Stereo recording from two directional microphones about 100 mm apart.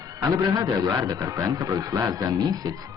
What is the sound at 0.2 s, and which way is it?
Speech, 35° right (ahead or behind).